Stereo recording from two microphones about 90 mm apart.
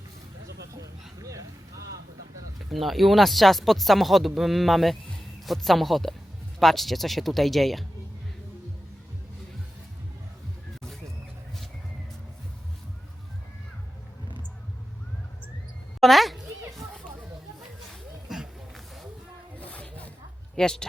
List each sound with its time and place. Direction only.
1.2 s a sound: 40° right (ahead or behind)
2.6 s speech: centre (ahead or behind)
16.0 s children playing: centre (ahead or behind)
18.3 s roaring cats: centre (ahead or behind)
19.5 s music: 15° left (ahead or behind)
20.6 s speech: 5° left (ahead or behind)